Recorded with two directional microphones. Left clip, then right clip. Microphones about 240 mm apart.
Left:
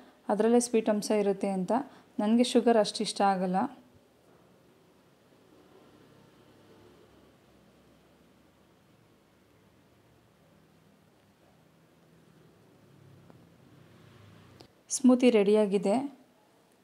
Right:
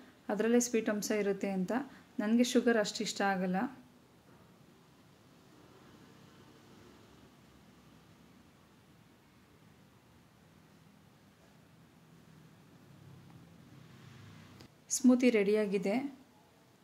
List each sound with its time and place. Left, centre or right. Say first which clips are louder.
0.3 s a woman's voice: left 5 dB; left
14.6 s speech: left 3 dB; left